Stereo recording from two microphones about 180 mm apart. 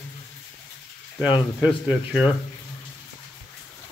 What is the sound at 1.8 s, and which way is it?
Speech, 5° right (ahead or behind).